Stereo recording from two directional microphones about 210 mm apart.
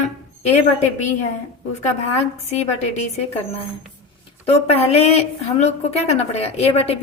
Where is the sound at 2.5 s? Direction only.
30° left (ahead or behind).